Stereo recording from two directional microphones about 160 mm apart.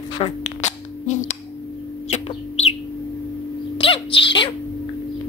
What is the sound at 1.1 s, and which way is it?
Music, 50° left (ahead or behind).